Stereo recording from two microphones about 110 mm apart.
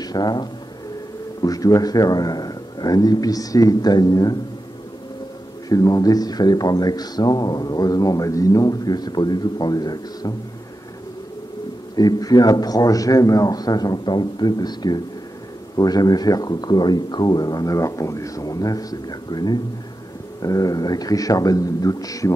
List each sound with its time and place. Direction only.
0.0 s speech: 40° left (ahead or behind)
5.7 s speech: 30° left (ahead or behind)
11.9 s speech: 35° left (ahead or behind)